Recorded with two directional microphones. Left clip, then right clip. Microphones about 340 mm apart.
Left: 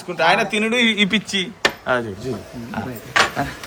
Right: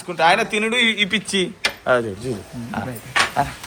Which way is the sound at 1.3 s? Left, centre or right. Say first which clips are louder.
Left 1 dB; centre.